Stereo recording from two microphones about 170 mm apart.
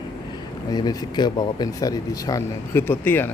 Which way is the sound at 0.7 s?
25° left (ahead or behind).